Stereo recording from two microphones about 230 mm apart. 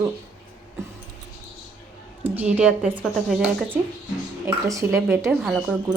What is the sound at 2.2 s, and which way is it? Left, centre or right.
A woman's voice, centre.